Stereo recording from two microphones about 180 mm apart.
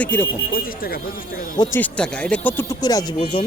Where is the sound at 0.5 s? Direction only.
55° left (ahead or behind).